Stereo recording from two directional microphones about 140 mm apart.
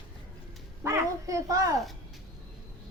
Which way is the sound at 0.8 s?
20° right (ahead or behind).